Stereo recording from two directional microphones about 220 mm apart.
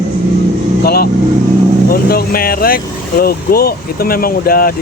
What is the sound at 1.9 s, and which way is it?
Speech, 45° left (ahead or behind).